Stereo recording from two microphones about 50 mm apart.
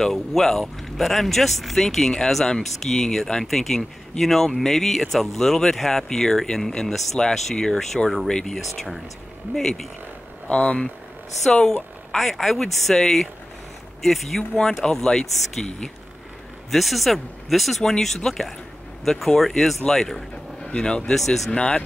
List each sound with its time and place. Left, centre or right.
0.0 s speech: centre
8.3 s speech: centre
8.7 s speech: centre
9.5 s speech: centre
10.5 s speech: left
11.4 s speech: centre
16.7 s speech: centre
21.5 s speech: centre